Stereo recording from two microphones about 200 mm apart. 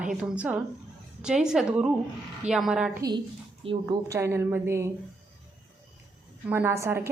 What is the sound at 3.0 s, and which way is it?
A woman's voice, 20° right (ahead or behind).